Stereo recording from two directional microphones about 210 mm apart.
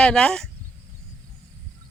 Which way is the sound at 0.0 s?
5° left (ahead or behind).